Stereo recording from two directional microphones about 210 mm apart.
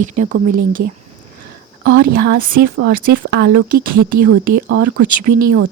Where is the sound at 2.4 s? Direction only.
45° right (ahead or behind).